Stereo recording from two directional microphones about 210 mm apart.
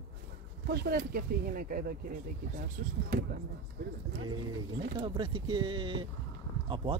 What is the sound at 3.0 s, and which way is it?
Speech, 45° right (ahead or behind).